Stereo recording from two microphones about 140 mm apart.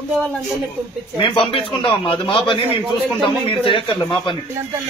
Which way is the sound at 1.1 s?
35° left (ahead or behind).